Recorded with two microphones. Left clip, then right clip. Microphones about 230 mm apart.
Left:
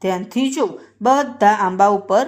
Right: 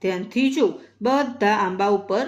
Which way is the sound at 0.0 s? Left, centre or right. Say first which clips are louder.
Left 2 dB; left.